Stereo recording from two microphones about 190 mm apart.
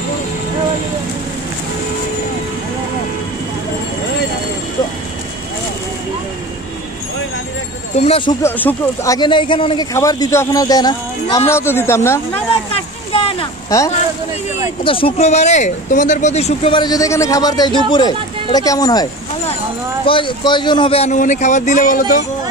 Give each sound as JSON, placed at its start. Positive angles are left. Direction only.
{"t": 8.0, "sound": "a man's voice", "side_deg": 30}
{"t": 8.4, "sound": "speech", "side_deg": 10}
{"t": 12.7, "sound": "a sound", "side_deg": 30}
{"t": 13.7, "sound": "speech", "side_deg": 15}
{"t": 14.8, "sound": "speech", "side_deg": 30}
{"t": 20.1, "sound": "a man's voice", "side_deg": 25}